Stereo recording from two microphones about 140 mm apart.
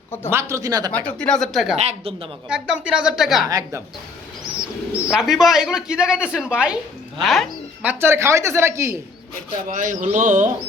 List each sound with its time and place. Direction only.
0.3 s a woman's voice: 20° right (ahead or behind)
0.9 s speech: 5° left (ahead or behind)
1.8 s a woman's voice: 50° right (ahead or behind)
2.5 s speech: 5° right (ahead or behind)
3.5 s a woman's voice: 20° right (ahead or behind)
5.1 s speech: centre (ahead or behind)
7.9 s a woman's voice: 15° right (ahead or behind)
9.6 s speech: 65° right (ahead or behind)